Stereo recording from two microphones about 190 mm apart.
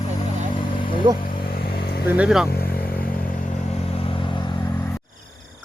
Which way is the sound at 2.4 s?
55° left (ahead or behind).